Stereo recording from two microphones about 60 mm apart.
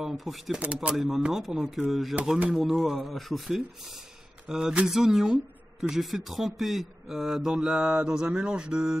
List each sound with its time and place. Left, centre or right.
0.0 s speech: centre
7.8 s mantra: right
8.2 s speech: centre